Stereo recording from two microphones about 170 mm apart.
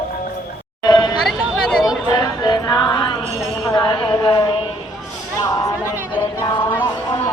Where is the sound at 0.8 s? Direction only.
25° left (ahead or behind).